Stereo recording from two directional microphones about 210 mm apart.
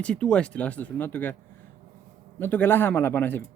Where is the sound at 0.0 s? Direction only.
5° left (ahead or behind).